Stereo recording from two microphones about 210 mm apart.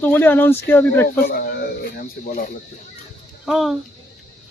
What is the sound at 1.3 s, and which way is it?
Speech, 45° left (ahead or behind).